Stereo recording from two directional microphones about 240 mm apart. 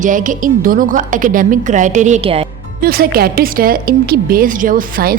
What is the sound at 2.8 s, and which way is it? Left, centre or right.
A woman's voice, right.